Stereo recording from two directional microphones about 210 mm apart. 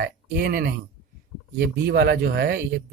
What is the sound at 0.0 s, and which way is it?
Speech, 45° right (ahead or behind).